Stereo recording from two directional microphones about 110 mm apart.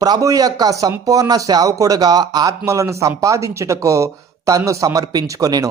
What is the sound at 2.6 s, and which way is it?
Speech, 30° right (ahead or behind).